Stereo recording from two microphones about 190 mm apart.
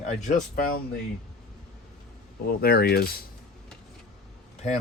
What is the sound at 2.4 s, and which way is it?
Speech, 55° left (ahead or behind).